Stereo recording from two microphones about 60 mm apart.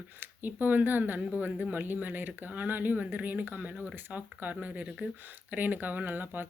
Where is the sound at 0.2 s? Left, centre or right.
Right.